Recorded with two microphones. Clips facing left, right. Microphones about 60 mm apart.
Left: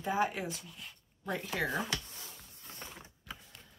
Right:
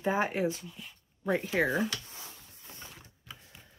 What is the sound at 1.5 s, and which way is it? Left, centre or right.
Speech, right.